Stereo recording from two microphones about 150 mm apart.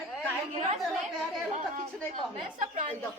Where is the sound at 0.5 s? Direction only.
45° right (ahead or behind).